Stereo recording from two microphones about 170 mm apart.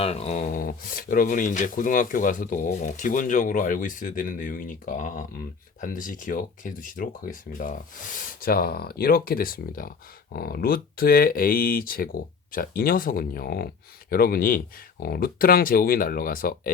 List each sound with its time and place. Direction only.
0.0 s speech: 40° left (ahead or behind); by 16.7 s 55° left (ahead or behind)